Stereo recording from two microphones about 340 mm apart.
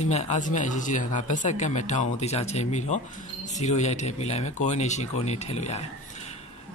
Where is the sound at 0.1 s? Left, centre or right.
Centre.